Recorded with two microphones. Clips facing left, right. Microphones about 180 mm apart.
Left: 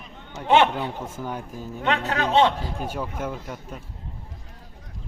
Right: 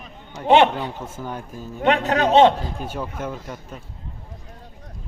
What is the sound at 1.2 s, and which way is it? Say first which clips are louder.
Speech: right 1 dB; 10° left (ahead or behind).